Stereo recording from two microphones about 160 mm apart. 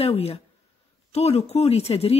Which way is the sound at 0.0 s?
40° left (ahead or behind).